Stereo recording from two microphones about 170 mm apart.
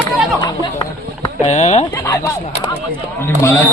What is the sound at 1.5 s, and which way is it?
Speech, 40° left (ahead or behind).